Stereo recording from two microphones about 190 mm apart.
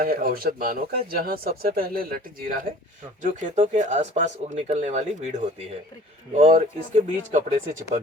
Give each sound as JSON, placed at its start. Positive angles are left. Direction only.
{"t": 0.0, "sound": "speech", "side_deg": -50}